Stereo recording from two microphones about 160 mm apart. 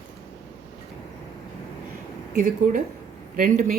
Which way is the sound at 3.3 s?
55° right (ahead or behind).